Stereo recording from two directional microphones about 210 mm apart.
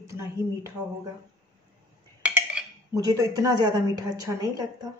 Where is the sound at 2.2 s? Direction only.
10° right (ahead or behind).